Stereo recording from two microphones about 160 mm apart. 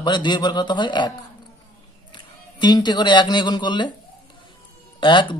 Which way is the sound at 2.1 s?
30° left (ahead or behind).